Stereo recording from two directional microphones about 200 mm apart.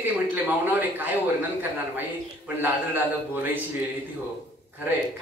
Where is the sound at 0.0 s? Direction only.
10° right (ahead or behind).